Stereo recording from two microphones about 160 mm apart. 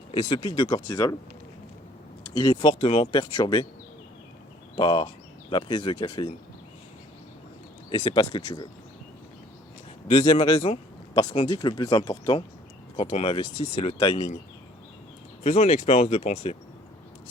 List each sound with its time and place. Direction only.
0.1 s speech: 30° left (ahead or behind)
2.3 s speech: 25° left (ahead or behind)
4.8 s speech: 30° left (ahead or behind)
7.9 s speech: 30° left (ahead or behind)
10.1 s speech: 35° left (ahead or behind)
15.4 s speech: 45° left (ahead or behind)